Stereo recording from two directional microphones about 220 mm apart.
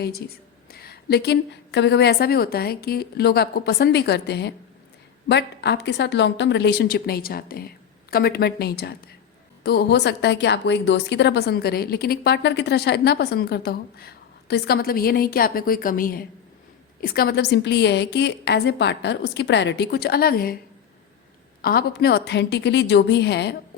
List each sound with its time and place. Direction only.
0.7 s a woman's voice: 45° left (ahead or behind)
21.6 s a woman's voice: 45° left (ahead or behind)